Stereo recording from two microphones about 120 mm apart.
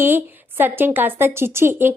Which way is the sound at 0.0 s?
20° right (ahead or behind).